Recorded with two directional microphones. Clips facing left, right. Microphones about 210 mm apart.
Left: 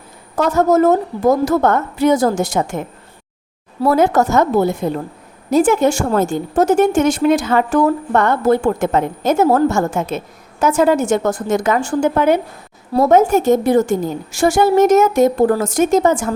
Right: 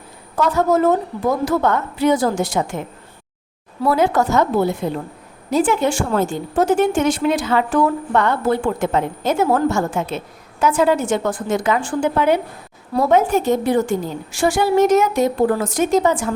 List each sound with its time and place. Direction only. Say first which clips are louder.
0.3 s a woman's voice: left 3 dB; 45° left (ahead or behind)
3.8 s a woman's voice: left 3 dB; 45° left (ahead or behind)